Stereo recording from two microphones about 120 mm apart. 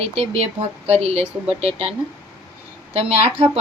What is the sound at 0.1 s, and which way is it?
Speech, 55° right (ahead or behind).